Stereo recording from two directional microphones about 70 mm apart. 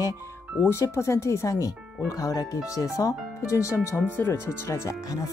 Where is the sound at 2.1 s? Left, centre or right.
Left.